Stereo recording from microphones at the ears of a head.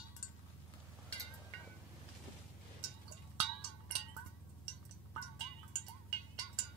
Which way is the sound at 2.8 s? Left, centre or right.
Right.